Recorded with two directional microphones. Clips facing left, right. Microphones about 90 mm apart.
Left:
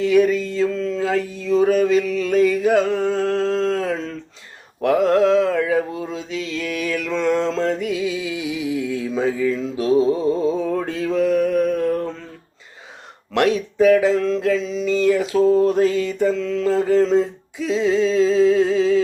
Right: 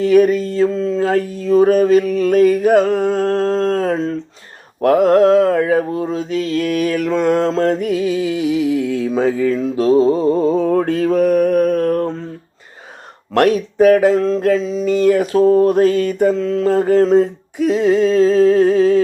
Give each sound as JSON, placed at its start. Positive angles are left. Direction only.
{"t": 0.0, "sound": "mantra", "side_deg": -45}
{"t": 13.3, "sound": "mantra", "side_deg": -45}
{"t": 16.3, "sound": "a sound", "side_deg": -40}